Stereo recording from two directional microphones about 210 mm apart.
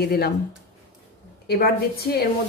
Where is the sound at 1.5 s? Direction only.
50° left (ahead or behind).